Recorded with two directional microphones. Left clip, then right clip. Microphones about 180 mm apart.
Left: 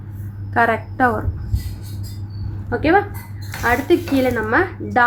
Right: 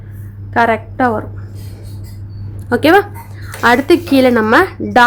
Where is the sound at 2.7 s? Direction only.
55° right (ahead or behind).